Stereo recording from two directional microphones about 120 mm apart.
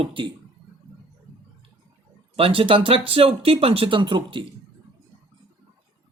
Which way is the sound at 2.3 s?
50° right (ahead or behind).